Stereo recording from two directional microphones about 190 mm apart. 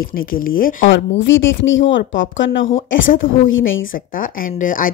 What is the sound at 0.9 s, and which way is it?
Speech, 75° left (ahead or behind).